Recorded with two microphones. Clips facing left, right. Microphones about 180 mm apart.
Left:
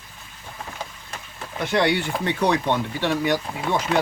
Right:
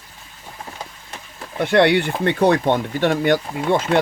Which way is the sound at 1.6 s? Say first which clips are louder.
Right 6 dB; 65° right (ahead or behind).